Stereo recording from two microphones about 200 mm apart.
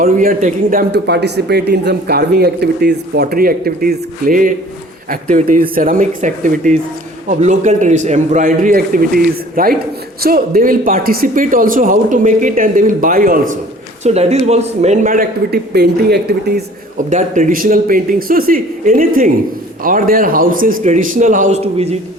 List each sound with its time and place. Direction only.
0.0 s a man's voice: 45° right (ahead or behind)
14.0 s a man's voice: 35° right (ahead or behind); by 16.6 s 55° right (ahead or behind)
17.1 s a man's voice: 40° right (ahead or behind)